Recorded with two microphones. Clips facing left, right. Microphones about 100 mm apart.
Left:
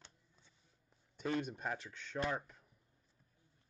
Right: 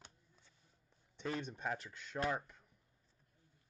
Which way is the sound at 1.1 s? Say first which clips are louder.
Left 4 dB; 5° left (ahead or behind).